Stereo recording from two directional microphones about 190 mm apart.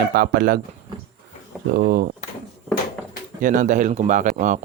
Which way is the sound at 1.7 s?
45° right (ahead or behind).